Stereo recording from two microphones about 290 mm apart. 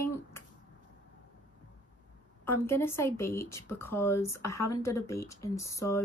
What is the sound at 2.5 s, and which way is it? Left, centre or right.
Speech, centre.